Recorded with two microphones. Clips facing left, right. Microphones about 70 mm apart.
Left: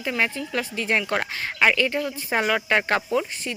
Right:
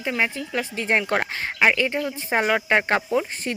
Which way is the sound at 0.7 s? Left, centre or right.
Right.